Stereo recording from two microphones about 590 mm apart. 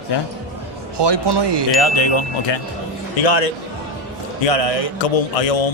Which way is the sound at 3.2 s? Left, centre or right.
Left.